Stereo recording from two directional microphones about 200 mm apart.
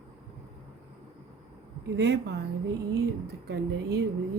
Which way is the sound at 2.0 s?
60° right (ahead or behind).